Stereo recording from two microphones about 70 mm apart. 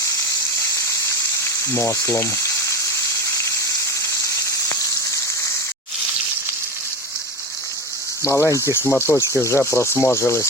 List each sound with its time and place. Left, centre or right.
1.6 s speech: left
8.2 s speech: left